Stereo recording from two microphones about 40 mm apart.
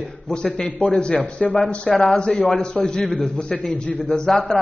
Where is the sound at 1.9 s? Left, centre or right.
Centre.